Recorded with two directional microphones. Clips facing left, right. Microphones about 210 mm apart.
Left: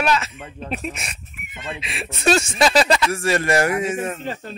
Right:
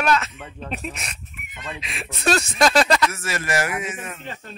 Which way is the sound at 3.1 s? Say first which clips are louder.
Left 7 dB; 30° left (ahead or behind).